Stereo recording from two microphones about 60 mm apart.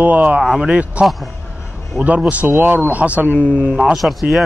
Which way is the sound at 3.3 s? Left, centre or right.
Left.